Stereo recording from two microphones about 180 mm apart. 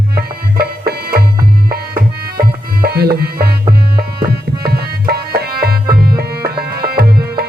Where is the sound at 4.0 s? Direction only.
60° right (ahead or behind).